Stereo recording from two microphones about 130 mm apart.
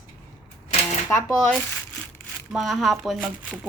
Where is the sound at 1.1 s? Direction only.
20° left (ahead or behind).